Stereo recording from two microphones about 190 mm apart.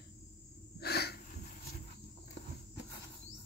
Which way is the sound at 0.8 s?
55° left (ahead or behind).